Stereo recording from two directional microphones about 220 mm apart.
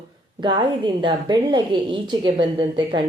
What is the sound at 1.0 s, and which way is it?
Speech, 20° right (ahead or behind).